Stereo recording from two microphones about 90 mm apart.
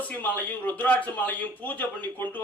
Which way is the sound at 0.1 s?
20° left (ahead or behind).